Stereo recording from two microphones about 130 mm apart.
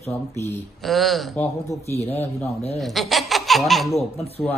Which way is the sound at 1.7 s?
20° left (ahead or behind).